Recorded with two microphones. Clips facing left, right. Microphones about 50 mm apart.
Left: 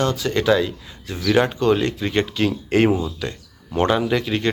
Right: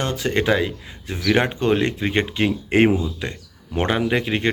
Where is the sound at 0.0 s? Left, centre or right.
Right.